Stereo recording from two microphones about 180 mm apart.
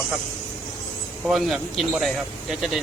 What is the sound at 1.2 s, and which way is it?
Speech, centre (ahead or behind).